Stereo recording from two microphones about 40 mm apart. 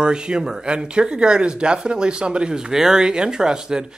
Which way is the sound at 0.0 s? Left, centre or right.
Right.